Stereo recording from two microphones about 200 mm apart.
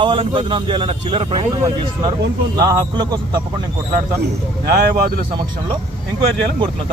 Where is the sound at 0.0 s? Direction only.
25° right (ahead or behind).